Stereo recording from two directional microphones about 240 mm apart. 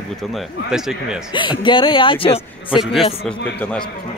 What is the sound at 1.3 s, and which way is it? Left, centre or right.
Speech, centre.